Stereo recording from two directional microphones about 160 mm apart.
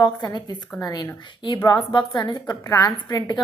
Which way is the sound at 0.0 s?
25° left (ahead or behind).